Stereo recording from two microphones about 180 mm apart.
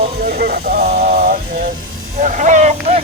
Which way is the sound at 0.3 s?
60° right (ahead or behind).